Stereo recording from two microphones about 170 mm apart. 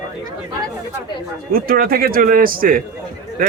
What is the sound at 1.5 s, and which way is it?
A man's voice, 60° right (ahead or behind).